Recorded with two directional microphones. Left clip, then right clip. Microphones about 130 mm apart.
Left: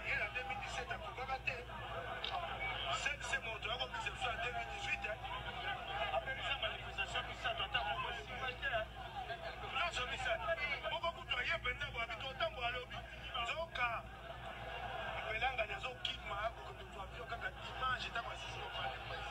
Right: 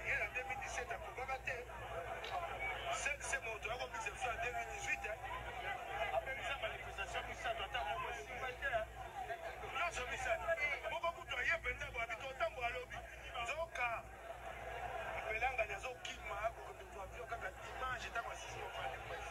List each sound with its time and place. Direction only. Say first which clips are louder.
0.0 s vehicle: even; 15° right (ahead or behind)
13.4 s a sound: left 1 dB; 15° right (ahead or behind)
15.0 s vehicle: left 1 dB; 15° right (ahead or behind)